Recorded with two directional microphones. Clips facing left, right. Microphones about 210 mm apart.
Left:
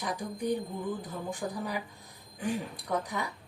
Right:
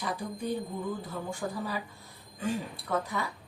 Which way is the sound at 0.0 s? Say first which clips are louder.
Left 1 dB; 15° left (ahead or behind).